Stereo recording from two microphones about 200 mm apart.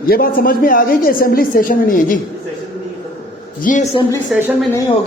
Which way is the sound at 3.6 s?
40° left (ahead or behind).